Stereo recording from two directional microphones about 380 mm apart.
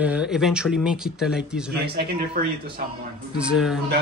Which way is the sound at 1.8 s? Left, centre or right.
Right.